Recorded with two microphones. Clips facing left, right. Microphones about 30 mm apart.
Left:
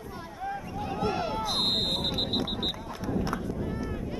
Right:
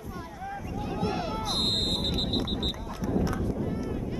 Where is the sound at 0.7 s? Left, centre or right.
Centre.